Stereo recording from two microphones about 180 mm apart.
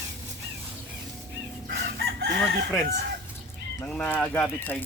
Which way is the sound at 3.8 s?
5° left (ahead or behind).